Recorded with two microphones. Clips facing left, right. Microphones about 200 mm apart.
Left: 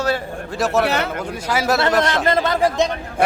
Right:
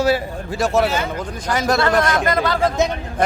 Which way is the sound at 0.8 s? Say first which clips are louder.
Even; 70° left (ahead or behind).